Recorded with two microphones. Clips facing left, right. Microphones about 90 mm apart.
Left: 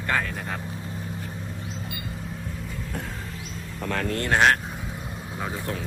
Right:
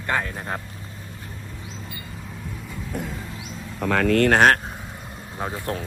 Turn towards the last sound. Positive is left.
turn(degrees=-35)  # may be behind; listen again after turning